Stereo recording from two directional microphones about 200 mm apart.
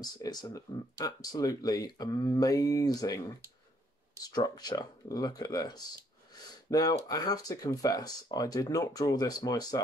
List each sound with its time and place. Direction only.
0.0 s speech: 20° left (ahead or behind)
4.2 s speech: 20° left (ahead or behind)